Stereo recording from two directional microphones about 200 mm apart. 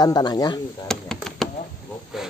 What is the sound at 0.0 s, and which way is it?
Speech, 20° left (ahead or behind).